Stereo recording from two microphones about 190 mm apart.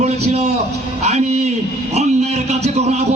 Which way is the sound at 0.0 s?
35° right (ahead or behind).